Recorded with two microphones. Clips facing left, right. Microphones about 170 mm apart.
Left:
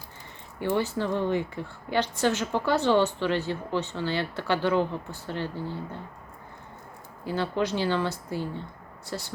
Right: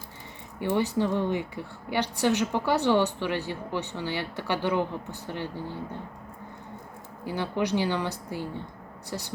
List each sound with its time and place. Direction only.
0.8 s a woman's voice: 15° right (ahead or behind)
7.3 s a woman's voice: 15° right (ahead or behind)